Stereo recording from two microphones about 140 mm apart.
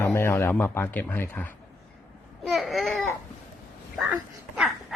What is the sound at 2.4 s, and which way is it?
Speech, centre (ahead or behind).